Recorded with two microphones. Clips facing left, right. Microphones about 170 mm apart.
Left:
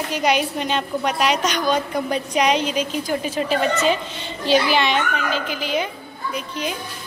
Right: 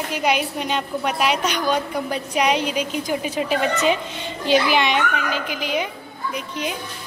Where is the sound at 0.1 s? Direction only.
5° right (ahead or behind).